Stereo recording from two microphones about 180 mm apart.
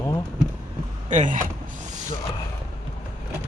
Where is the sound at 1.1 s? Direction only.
45° right (ahead or behind).